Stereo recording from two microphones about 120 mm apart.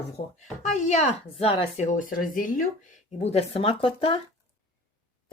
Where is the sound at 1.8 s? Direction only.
90° left.